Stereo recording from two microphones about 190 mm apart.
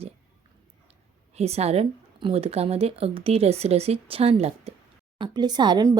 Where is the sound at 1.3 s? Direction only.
35° right (ahead or behind).